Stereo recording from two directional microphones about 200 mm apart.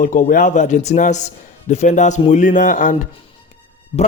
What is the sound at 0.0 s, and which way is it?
Speech, 40° left (ahead or behind).